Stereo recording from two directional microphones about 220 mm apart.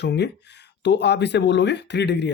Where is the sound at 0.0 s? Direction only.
50° left (ahead or behind).